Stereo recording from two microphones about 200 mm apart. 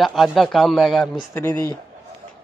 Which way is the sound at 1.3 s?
15° left (ahead or behind).